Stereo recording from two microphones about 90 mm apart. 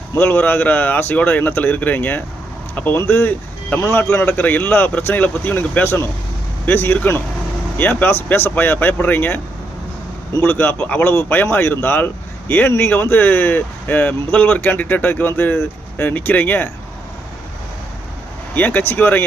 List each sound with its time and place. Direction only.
0.2 s speech: 20° left (ahead or behind)
18.5 s speech: 20° left (ahead or behind)